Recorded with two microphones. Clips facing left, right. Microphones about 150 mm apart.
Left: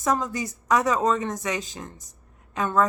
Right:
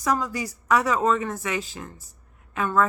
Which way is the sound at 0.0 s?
20° left (ahead or behind).